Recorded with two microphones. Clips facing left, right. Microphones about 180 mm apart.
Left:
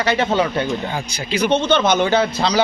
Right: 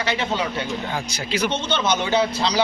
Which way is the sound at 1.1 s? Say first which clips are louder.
Left 4 dB; centre (ahead or behind).